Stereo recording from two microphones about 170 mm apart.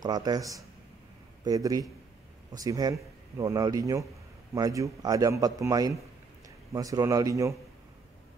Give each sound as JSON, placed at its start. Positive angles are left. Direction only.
{"t": 0.0, "sound": "speech", "side_deg": -25}